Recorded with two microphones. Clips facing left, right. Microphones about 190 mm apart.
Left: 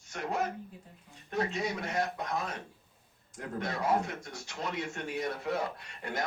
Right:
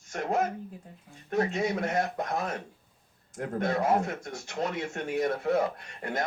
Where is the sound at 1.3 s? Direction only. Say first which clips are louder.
Right 5 dB; 50° right (ahead or behind).